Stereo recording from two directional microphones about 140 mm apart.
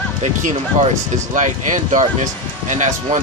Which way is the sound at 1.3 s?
65° right (ahead or behind).